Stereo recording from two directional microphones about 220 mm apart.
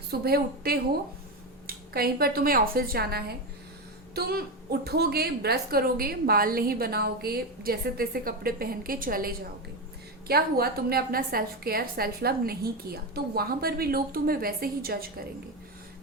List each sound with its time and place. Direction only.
0.1 s a woman's voice: 45° right (ahead or behind)